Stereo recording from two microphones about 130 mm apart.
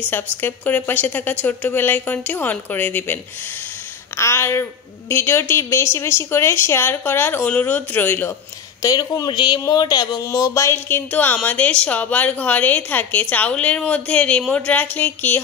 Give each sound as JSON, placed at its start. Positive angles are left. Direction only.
{"t": 0.1, "sound": "speech", "side_deg": 15}
{"t": 4.2, "sound": "speech", "side_deg": 20}
{"t": 8.8, "sound": "speech", "side_deg": 30}